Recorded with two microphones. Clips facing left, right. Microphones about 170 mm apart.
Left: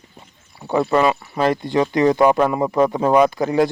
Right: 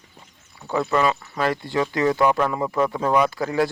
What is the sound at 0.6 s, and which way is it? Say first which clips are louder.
Speech: left 4 dB; 30° left (ahead or behind).